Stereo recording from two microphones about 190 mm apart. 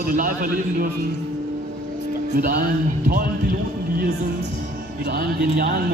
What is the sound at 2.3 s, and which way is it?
Speech, 50° right (ahead or behind).